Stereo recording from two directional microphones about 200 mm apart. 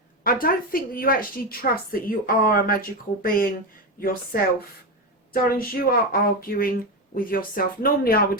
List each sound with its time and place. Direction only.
0.3 s a woman's voice: 45° left (ahead or behind)